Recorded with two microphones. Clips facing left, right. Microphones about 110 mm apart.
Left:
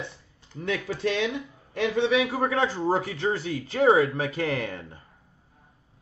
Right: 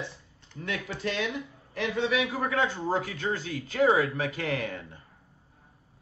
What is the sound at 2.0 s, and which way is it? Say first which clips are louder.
Speech: left 3 dB; 30° left (ahead or behind).